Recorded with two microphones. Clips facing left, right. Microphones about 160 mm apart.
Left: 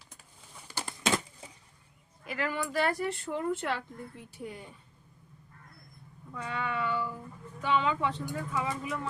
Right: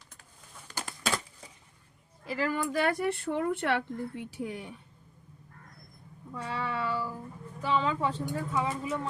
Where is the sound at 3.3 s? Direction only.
65° right (ahead or behind); by 4.8 s 80° right.